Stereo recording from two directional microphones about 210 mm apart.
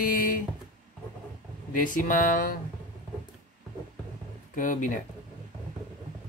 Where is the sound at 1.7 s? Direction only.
40° left (ahead or behind).